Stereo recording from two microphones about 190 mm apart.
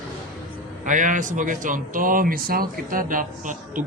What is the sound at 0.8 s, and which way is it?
Speech, 40° right (ahead or behind).